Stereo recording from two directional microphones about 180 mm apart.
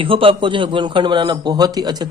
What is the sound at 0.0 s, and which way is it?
A man's voice, 30° right (ahead or behind).